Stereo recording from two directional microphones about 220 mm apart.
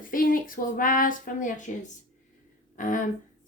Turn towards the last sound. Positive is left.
turn(degrees=35)  # may be behind; listen again after turning